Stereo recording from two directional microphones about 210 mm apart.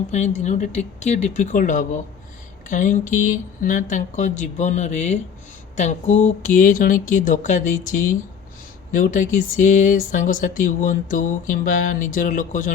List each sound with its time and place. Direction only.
0.1 s speech: 35° left (ahead or behind)